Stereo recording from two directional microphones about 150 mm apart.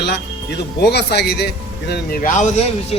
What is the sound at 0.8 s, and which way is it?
A man's voice, 90° left.